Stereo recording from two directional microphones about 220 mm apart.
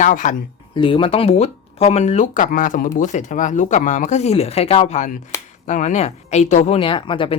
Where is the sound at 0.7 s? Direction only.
20° left (ahead or behind).